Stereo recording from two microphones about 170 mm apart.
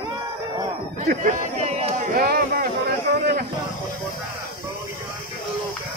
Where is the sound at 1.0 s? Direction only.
50° right (ahead or behind).